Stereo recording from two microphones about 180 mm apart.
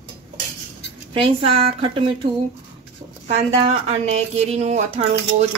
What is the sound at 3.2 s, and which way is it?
A woman's voice, 35° right (ahead or behind).